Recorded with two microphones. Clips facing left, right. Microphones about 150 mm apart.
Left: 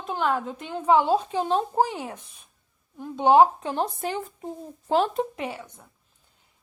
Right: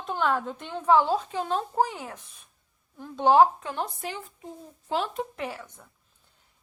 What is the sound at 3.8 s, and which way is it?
Speech, 40° left (ahead or behind).